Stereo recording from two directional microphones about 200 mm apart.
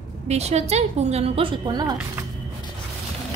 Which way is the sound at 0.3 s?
35° right (ahead or behind).